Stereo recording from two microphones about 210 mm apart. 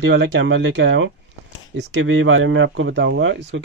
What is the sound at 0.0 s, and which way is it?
Speech, 55° right (ahead or behind).